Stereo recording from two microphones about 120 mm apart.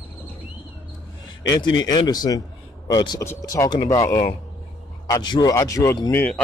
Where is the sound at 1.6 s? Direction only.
35° left (ahead or behind).